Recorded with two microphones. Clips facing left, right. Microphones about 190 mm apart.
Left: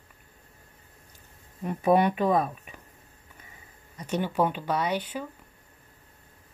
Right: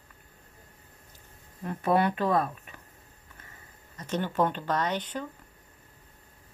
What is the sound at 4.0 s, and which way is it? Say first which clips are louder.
Speech: left 1 dB; 10° left (ahead or behind).